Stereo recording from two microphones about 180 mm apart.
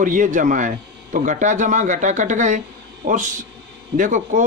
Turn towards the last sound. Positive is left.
turn(degrees=-45)  # may be behind; listen again after turning